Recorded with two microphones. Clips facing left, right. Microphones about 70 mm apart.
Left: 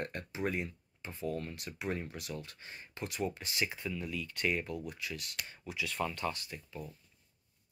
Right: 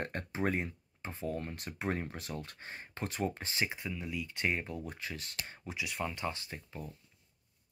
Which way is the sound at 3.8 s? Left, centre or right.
Centre.